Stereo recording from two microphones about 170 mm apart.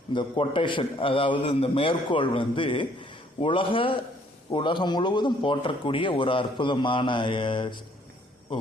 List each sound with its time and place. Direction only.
0.1 s a man's voice: 30° left (ahead or behind)